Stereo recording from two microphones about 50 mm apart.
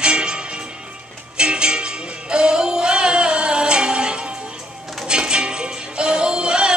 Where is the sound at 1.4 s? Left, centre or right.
Centre.